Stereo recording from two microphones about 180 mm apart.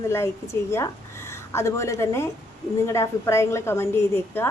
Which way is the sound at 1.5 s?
15° left (ahead or behind).